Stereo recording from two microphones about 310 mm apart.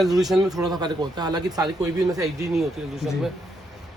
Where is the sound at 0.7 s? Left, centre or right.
Centre.